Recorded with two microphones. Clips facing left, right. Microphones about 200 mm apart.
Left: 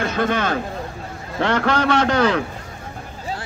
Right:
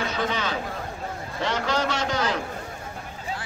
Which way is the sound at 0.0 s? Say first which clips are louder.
Left 6 dB; 55° left (ahead or behind).